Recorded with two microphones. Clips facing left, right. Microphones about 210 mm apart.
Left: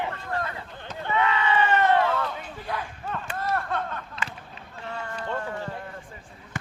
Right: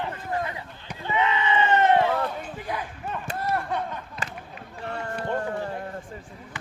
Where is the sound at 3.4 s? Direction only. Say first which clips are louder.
Right 1 dB; 15° right (ahead or behind).